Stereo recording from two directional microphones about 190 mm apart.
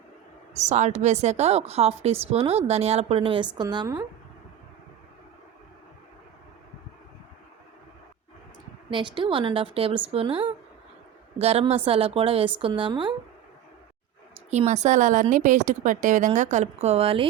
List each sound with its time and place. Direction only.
0.5 s a woman's voice: 35° right (ahead or behind); by 4.0 s 20° right (ahead or behind)
8.9 s a woman's voice: 25° right (ahead or behind)
14.5 s a woman's voice: 35° right (ahead or behind)